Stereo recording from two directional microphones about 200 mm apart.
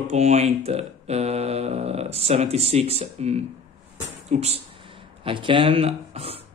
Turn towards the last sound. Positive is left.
turn(degrees=-30)  # may be behind; listen again after turning